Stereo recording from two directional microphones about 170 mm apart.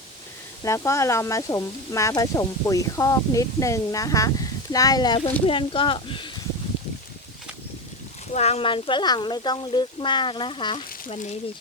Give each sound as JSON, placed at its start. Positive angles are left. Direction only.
{"t": 0.6, "sound": "speech", "side_deg": 15}
{"t": 8.3, "sound": "speech", "side_deg": 40}